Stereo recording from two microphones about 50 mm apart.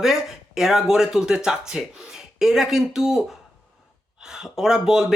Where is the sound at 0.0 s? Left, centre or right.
Centre.